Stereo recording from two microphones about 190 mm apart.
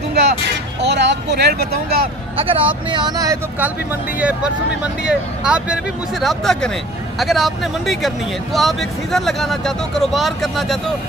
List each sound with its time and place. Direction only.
0.8 s speech: 60° right (ahead or behind)
2.3 s speech: 30° right (ahead or behind); by 10.8 s centre (ahead or behind)